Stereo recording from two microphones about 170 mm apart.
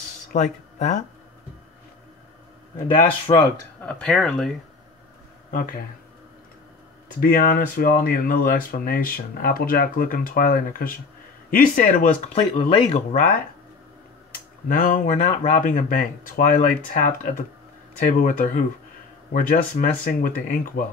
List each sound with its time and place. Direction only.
0.3 s speech: 50° left (ahead or behind)
2.9 s speech: 30° left (ahead or behind)
3.8 s speech: 5° left (ahead or behind)
5.5 s speech: 55° left (ahead or behind)
7.2 s speech: 55° left (ahead or behind)
12.4 s speech: 30° left (ahead or behind)
14.3 s a sound: 55° left (ahead or behind)
15.1 s speech: 40° left (ahead or behind)